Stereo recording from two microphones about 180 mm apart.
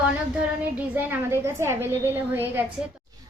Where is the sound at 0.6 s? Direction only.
10° right (ahead or behind).